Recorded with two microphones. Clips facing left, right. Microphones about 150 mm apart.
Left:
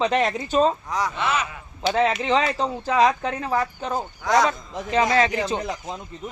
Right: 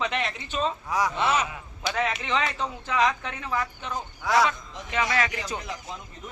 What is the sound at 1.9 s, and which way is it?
Speech, 35° left (ahead or behind).